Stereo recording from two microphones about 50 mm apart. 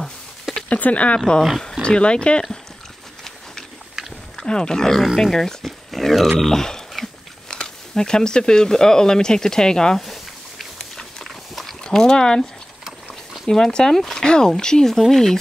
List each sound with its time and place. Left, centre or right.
0.0 s a sound: centre
0.7 s speech: left
4.4 s speech: centre
5.7 s a sound: centre
7.4 s speech: centre
11.0 s pig: centre
11.8 s speech: centre
13.5 s speech: centre